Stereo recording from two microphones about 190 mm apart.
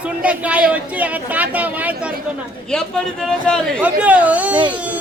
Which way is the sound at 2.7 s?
5° left (ahead or behind).